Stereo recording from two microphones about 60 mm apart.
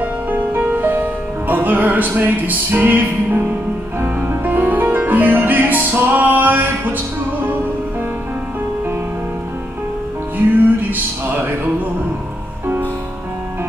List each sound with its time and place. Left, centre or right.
0.0 s music: right
10.3 s music: right